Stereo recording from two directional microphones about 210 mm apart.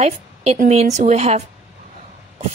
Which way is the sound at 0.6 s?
30° right (ahead or behind).